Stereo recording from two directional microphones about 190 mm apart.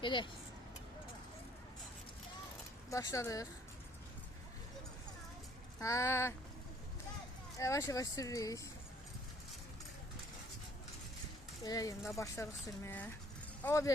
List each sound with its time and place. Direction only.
0.0 s speech: 25° left (ahead or behind)
2.9 s speech: 15° left (ahead or behind)
5.8 s speech: 15° left (ahead or behind)
7.6 s speech: 15° left (ahead or behind)
11.6 s speech: 20° left (ahead or behind)